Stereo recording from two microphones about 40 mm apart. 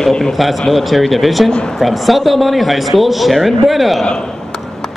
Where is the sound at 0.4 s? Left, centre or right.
Centre.